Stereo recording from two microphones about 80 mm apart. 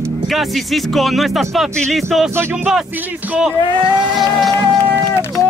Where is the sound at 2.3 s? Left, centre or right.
Right.